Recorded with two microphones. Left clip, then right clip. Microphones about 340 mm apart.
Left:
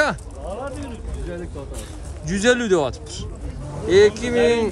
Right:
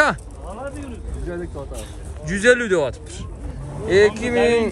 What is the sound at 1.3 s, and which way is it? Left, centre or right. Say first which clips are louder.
Speech: right 3 dB; centre.